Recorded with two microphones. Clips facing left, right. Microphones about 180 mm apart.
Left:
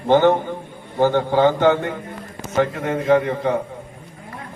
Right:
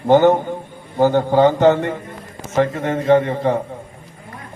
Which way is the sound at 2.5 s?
30° right (ahead or behind).